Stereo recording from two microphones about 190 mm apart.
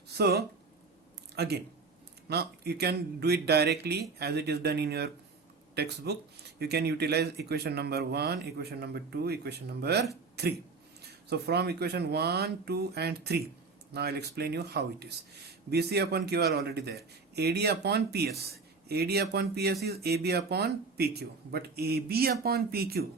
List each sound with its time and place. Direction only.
0.2 s speech: 55° right (ahead or behind)